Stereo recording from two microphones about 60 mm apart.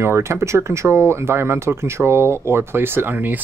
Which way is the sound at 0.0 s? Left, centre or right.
Right.